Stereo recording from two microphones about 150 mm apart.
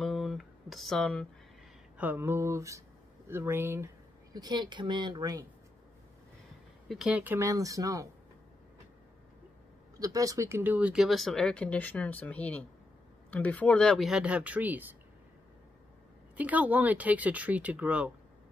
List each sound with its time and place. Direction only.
0.0 s a sound: centre (ahead or behind)
2.0 s speech: 15° right (ahead or behind)
6.9 s speech: 5° right (ahead or behind)
7.3 s speech: 20° right (ahead or behind)
9.9 s speech: 25° right (ahead or behind)
16.3 s speech: 10° right (ahead or behind)